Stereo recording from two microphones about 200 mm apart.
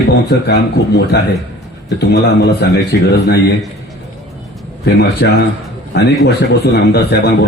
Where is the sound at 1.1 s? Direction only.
55° left (ahead or behind).